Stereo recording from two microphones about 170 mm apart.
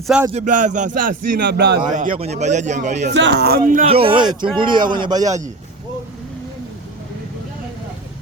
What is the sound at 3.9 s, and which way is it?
A man's voice, 35° right (ahead or behind).